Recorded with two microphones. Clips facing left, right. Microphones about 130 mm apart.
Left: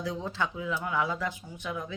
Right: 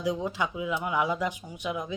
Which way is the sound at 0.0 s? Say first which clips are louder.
Right 3 dB; 15° right (ahead or behind).